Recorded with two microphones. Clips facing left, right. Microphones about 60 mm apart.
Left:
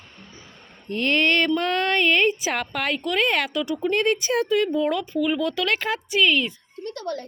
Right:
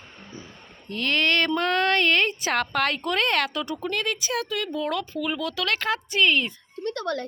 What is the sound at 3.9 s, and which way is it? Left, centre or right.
Speech, left.